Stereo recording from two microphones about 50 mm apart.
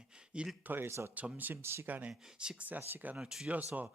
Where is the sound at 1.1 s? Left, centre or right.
Right.